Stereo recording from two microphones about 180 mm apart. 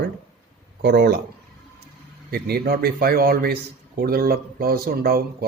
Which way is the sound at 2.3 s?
60° right (ahead or behind).